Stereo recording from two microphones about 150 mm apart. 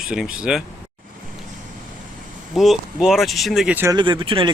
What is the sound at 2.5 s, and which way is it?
Speech, centre (ahead or behind).